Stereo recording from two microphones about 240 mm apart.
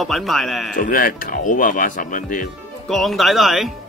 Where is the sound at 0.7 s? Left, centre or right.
Left.